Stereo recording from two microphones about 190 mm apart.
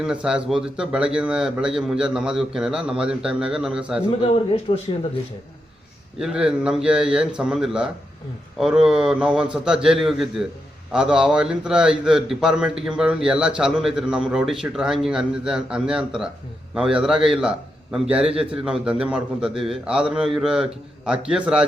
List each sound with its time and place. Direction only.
0.0 s a man's voice: 5° right (ahead or behind)
4.1 s a man's voice: 30° left (ahead or behind)
6.1 s a man's voice: 5° right (ahead or behind)